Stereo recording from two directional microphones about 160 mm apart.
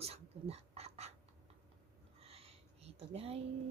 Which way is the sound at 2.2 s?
40° right (ahead or behind).